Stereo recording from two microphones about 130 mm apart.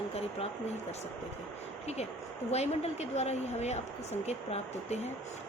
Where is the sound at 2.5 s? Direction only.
55° left (ahead or behind).